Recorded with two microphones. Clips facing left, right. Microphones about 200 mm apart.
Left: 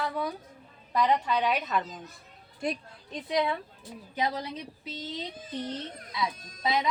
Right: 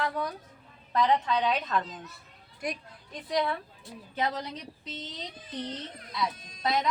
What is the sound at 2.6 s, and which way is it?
Speech, 25° left (ahead or behind).